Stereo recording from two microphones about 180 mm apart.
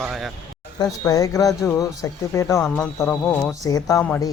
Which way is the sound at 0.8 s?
20° left (ahead or behind).